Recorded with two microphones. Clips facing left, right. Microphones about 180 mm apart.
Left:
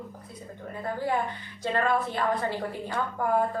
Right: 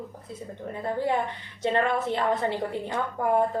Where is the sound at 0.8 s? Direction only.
25° right (ahead or behind).